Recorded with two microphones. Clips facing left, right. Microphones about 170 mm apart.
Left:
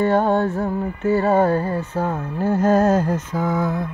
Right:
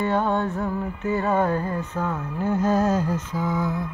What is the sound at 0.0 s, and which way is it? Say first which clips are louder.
Music: left 5 dB; 35° left (ahead or behind).